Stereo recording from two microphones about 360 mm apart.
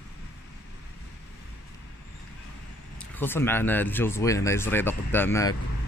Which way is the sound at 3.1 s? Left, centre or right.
Centre.